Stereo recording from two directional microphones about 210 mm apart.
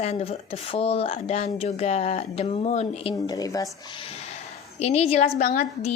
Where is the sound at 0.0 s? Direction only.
30° left (ahead or behind).